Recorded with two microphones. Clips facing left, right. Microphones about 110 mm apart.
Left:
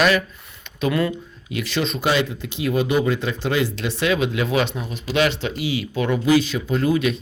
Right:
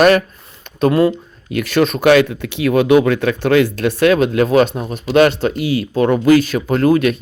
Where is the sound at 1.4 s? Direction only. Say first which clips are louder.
Right 9 dB; 55° right (ahead or behind).